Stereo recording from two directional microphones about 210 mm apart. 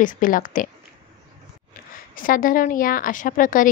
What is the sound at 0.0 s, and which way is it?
Speech, 40° left (ahead or behind).